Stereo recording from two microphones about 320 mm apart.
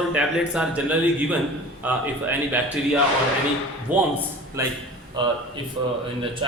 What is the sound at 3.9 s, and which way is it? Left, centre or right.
A man's voice, centre.